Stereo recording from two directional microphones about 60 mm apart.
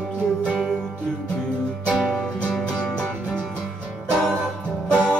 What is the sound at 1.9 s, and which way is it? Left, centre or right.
Music, centre.